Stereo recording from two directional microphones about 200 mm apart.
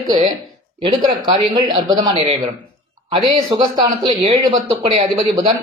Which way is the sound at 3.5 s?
25° right (ahead or behind).